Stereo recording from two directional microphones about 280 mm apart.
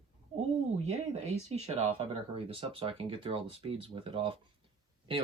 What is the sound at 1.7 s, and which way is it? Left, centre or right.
Speech, right.